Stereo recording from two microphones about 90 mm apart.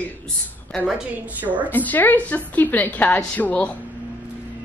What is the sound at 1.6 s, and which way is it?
A woman's voice, 20° left (ahead or behind).